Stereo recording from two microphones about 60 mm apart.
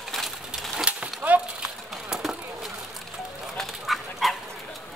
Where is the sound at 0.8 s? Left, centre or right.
Right.